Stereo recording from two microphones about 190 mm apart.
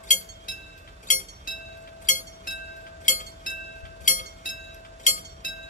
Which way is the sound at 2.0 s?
40° left (ahead or behind).